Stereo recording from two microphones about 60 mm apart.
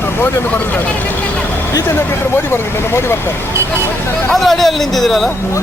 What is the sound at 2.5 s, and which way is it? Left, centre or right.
Speech, left.